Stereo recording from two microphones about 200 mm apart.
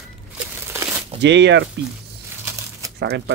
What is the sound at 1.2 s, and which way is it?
Speech, 60° right (ahead or behind).